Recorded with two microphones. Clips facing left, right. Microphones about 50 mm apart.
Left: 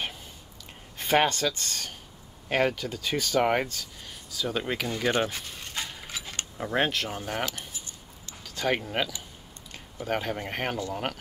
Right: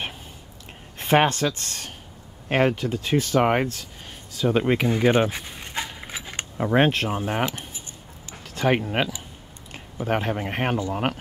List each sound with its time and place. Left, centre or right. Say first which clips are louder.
0.9 s speech: right 4 dB; right
3.7 s a sound: right 1 dB; right
8.5 s speech: right 6 dB; right